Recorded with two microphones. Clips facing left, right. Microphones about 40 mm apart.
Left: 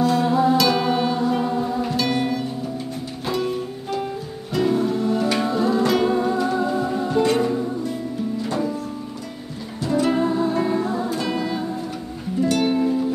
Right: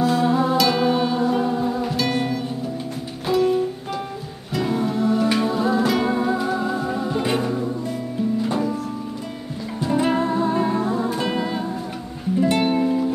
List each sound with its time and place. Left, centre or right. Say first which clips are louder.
0.0 s music: left 1 dB; centre
8.5 s music: right 1 dB; centre
9.8 s music: even; right
10.1 s music: even; centre
10.7 s music: even; centre
11.1 s music: right 1 dB; right